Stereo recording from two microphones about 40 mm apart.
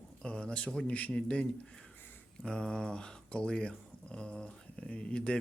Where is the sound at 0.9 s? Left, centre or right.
Left.